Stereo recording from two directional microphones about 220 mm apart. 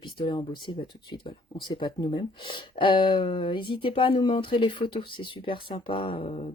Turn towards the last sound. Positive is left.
turn(degrees=30)  # may be behind; listen again after turning